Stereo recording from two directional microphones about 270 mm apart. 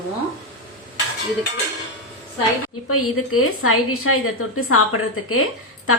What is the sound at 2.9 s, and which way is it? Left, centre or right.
A woman's voice, left.